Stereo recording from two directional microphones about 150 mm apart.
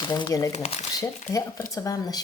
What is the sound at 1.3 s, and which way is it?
Speech, 20° left (ahead or behind).